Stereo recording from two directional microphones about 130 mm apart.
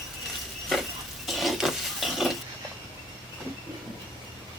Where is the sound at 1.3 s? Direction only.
Centre (ahead or behind).